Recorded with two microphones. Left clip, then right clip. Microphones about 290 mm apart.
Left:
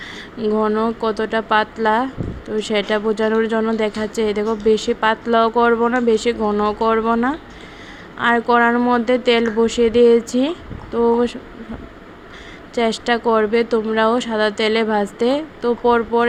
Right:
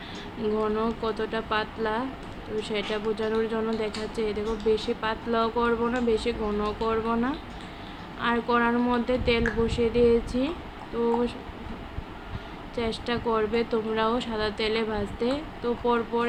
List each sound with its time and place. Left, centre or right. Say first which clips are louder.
0.6 s speech: left 9 dB; left
12.7 s speech: left 11 dB; left